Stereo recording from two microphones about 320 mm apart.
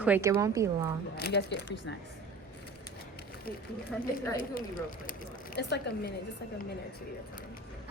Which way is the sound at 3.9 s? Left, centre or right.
Centre.